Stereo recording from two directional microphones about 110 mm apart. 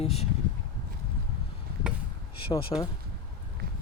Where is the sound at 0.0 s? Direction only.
65° left (ahead or behind).